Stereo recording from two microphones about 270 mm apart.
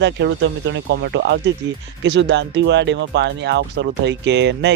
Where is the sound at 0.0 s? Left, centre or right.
Right.